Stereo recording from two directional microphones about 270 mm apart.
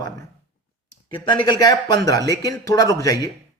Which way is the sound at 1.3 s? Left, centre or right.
Centre.